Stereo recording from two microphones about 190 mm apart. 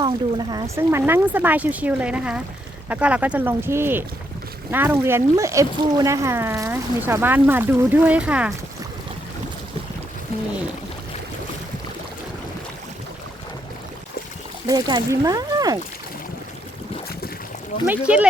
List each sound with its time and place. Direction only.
0.0 s speech: 20° right (ahead or behind)
14.7 s speech: 20° right (ahead or behind)
17.8 s speech: 5° right (ahead or behind)